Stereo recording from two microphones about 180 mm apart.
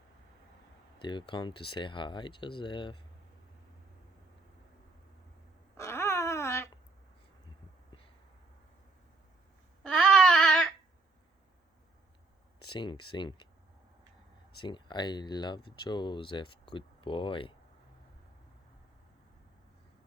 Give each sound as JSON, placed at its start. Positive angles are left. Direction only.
{"t": 0.9, "sound": "speech", "side_deg": 25}
{"t": 5.7, "sound": "a sound", "side_deg": 15}
{"t": 9.8, "sound": "babbling", "side_deg": 5}
{"t": 12.6, "sound": "speech", "side_deg": 25}
{"t": 14.6, "sound": "speech", "side_deg": 25}